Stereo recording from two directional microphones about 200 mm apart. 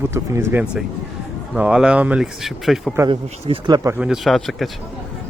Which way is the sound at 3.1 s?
30° right (ahead or behind).